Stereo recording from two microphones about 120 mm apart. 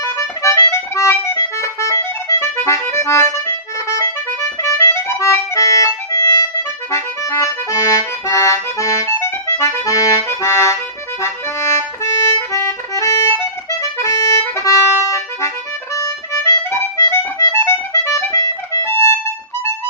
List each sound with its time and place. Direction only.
0.0 s accordion: 25° left (ahead or behind)
16.7 s accordion: 20° left (ahead or behind)